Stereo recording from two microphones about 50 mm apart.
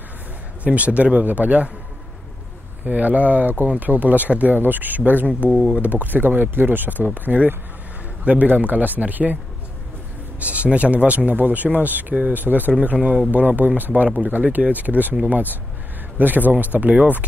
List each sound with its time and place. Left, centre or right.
0.7 s speech: right
2.8 s speech: right
5.9 s speech: right
10.4 s speech: right
12.9 s speech: right